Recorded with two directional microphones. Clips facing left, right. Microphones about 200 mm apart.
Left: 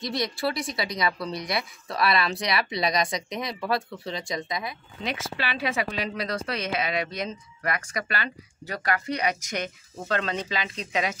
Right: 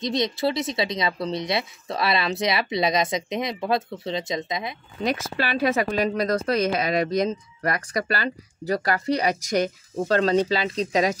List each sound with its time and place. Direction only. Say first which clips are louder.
0.0 s speech: right 4 dB; 20° right (ahead or behind)
5.0 s a woman's voice: right 6 dB; 45° right (ahead or behind)